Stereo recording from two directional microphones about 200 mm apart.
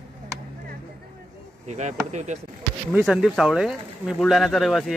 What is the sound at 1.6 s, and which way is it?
Speech, 35° right (ahead or behind).